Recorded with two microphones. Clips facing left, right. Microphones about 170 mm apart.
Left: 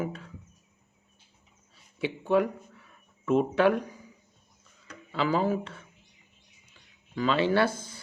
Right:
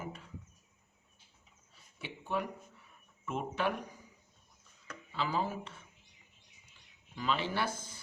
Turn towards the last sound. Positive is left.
turn(degrees=75)  # may be behind; listen again after turning